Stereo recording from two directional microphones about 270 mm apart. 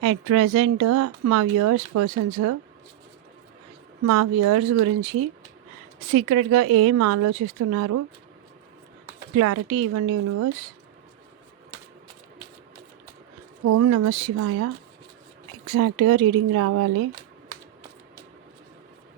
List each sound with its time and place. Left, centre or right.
0.0 s speech: right
4.0 s speech: right
4.9 s speech: right
9.3 s speech: right
13.7 s speech: right
15.7 s speech: right